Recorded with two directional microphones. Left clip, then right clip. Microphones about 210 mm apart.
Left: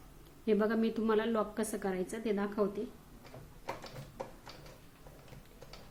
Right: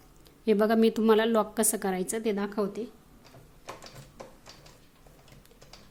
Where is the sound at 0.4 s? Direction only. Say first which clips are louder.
Right 8 dB; 50° right (ahead or behind).